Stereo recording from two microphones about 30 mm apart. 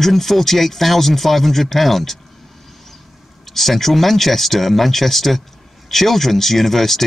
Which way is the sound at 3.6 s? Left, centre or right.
Centre.